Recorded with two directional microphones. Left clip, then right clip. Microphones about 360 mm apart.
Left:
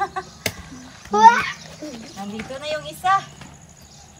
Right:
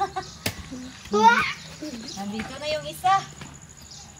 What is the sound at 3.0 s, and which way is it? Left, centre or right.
Speech, centre.